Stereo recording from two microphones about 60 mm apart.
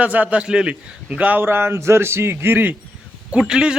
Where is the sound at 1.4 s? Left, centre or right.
Right.